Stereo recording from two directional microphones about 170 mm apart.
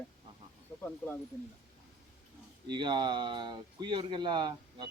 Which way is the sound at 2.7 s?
25° right (ahead or behind).